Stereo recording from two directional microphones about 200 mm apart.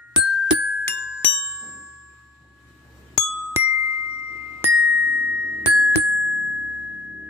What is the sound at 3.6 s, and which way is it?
Glockenspiel, 15° right (ahead or behind).